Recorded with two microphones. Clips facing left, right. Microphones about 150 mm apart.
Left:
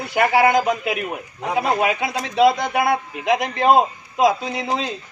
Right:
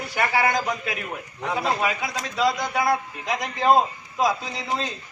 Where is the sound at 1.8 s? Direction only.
65° left (ahead or behind).